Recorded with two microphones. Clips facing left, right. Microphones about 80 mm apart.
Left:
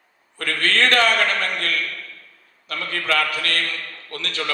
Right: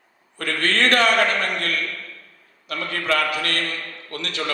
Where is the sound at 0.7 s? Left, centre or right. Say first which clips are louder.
Even; left.